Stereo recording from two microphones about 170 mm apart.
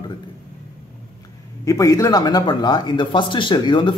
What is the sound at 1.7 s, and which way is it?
A man's voice, 20° left (ahead or behind).